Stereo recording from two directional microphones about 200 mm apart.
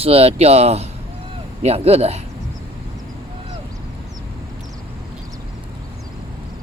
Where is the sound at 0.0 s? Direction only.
30° right (ahead or behind).